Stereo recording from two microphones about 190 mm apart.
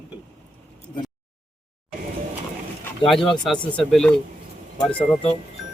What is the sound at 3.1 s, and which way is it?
Speech, centre (ahead or behind).